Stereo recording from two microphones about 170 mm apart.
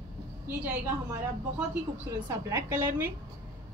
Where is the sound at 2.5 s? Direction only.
15° right (ahead or behind).